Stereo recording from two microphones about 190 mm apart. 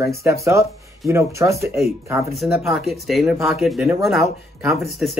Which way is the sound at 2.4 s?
Centre (ahead or behind).